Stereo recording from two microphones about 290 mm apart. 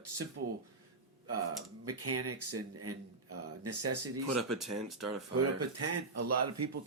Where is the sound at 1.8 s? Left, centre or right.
Right.